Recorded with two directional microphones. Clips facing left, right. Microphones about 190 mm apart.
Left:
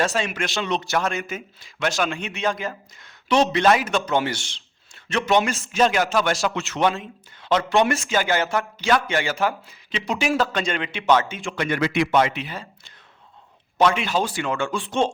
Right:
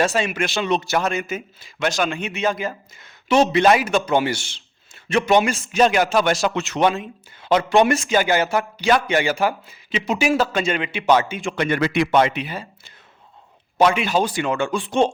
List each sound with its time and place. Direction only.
0.1 s a man's voice: 5° right (ahead or behind)
11.7 s a man's voice: 50° right (ahead or behind)
12.1 s speech: 25° right (ahead or behind)
12.4 s a man's voice: 15° right (ahead or behind)
13.7 s a man's voice: 10° right (ahead or behind)